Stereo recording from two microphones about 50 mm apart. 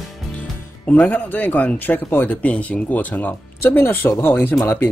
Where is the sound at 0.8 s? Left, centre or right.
Left.